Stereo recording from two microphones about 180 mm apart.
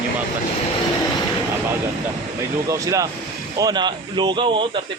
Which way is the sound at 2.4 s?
20° right (ahead or behind).